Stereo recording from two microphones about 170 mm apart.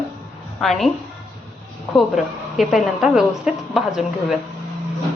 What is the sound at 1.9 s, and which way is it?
A woman's voice, centre (ahead or behind).